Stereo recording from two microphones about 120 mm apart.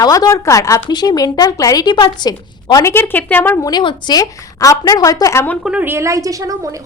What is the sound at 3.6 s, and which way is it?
A woman's voice, 35° left (ahead or behind).